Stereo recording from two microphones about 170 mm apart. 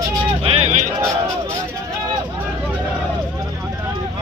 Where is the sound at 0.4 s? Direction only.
35° right (ahead or behind).